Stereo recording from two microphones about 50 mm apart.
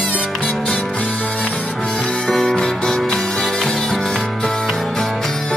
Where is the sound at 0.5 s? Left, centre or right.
Centre.